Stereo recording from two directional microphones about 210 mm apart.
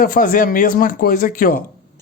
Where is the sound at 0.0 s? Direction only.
40° left (ahead or behind).